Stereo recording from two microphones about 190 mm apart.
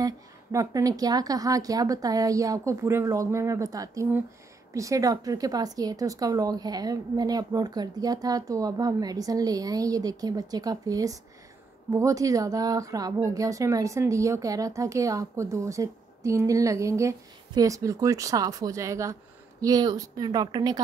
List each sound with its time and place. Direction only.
0.0 s a woman's voice: 15° right (ahead or behind)